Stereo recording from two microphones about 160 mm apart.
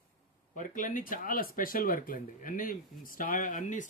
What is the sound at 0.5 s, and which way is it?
Speech, 55° left (ahead or behind).